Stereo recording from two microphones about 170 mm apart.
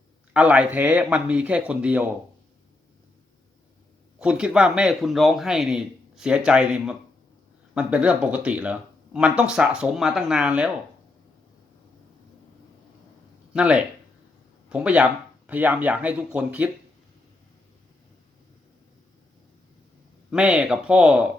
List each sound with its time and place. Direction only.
0.3 s speech: 5° right (ahead or behind)
4.2 s speech: 5° right (ahead or behind)
13.5 s speech: 5° right (ahead or behind)
20.3 s speech: 5° right (ahead or behind)